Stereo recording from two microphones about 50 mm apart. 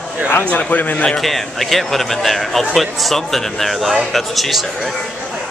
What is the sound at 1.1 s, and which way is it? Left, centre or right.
A man's voice, centre.